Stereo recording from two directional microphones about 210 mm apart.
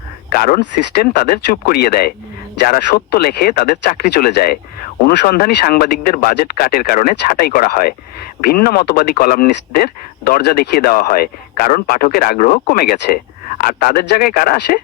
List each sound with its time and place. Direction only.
0.3 s speech: 45° left (ahead or behind)